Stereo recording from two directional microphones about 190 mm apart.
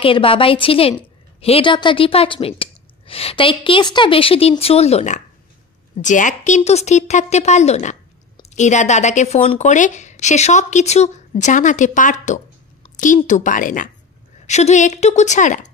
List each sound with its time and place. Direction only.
0.0 s a woman's voice: 30° left (ahead or behind)